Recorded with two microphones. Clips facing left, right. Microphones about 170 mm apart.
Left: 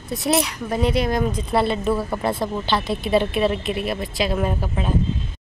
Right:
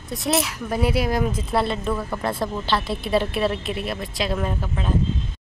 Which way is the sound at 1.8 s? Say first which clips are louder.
Left 4 dB; 25° left (ahead or behind).